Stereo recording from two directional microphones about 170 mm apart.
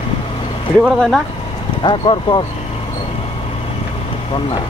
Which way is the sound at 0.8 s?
Centre (ahead or behind).